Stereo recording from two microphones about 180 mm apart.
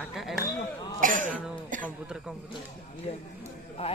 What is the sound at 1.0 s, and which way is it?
Cough, 50° right (ahead or behind).